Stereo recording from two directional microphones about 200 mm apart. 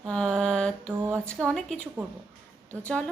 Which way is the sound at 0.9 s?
15° right (ahead or behind).